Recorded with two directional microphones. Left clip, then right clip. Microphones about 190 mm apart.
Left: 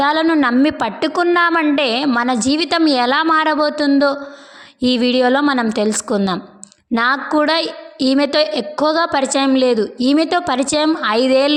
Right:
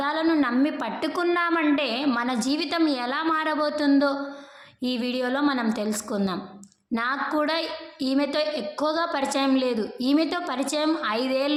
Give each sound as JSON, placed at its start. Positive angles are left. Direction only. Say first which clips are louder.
{"t": 0.0, "sound": "a woman's voice", "louder": "left 9 dB", "side_deg": 45}